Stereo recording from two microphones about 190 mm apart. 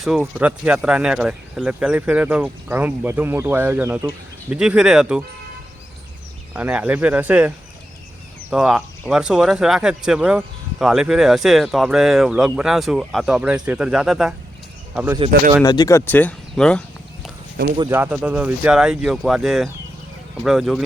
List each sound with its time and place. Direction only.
0.0 s speech: centre (ahead or behind)
6.5 s speech: 5° right (ahead or behind)
15.6 s speech: 20° left (ahead or behind); by 16.8 s 5° left (ahead or behind)
17.7 s speech: 15° right (ahead or behind)